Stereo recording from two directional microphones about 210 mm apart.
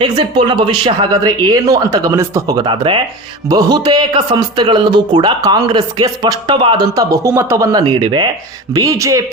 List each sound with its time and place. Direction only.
0.0 s speech: 25° right (ahead or behind)